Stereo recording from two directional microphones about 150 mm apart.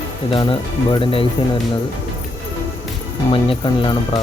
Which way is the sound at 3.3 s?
35° left (ahead or behind).